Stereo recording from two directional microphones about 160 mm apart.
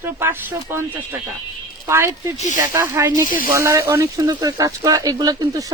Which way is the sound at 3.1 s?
55° left (ahead or behind).